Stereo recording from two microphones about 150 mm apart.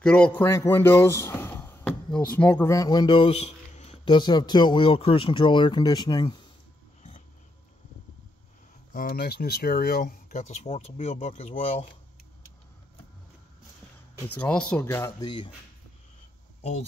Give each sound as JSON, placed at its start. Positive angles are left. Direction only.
{"t": 0.0, "sound": "a man's voice", "side_deg": 5}
{"t": 2.7, "sound": "a man's voice", "side_deg": 25}
{"t": 4.0, "sound": "speech", "side_deg": 30}
{"t": 7.0, "sound": "a sound", "side_deg": 45}
{"t": 8.9, "sound": "speech", "side_deg": 80}
{"t": 14.2, "sound": "speech", "side_deg": 10}
{"t": 15.2, "sound": "speech", "side_deg": 30}